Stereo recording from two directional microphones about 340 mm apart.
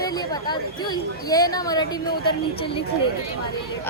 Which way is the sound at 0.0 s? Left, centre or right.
Centre.